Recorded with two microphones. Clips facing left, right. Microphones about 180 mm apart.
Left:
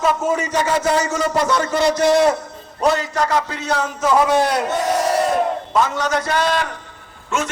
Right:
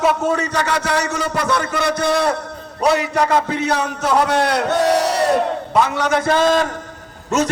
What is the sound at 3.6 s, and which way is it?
A man's voice, 65° right (ahead or behind).